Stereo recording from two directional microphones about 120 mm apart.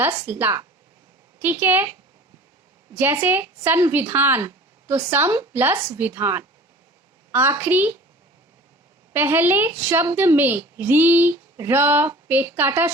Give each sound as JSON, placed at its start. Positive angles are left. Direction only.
{"t": 0.3, "sound": "a woman's voice", "side_deg": -15}
{"t": 7.3, "sound": "a sound", "side_deg": -20}
{"t": 7.6, "sound": "a woman's voice", "side_deg": -15}
{"t": 9.1, "sound": "a woman's voice", "side_deg": -15}